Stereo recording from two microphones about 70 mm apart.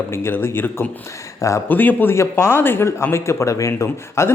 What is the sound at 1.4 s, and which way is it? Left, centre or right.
Speech, left.